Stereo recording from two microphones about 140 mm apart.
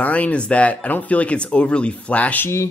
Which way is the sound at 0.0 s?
10° left (ahead or behind).